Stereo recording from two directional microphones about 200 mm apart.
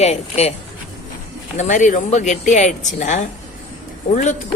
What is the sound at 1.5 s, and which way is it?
Speech, 35° left (ahead or behind).